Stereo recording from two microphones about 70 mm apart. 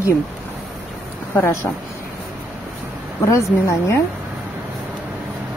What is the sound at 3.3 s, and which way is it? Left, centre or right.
Speech, left.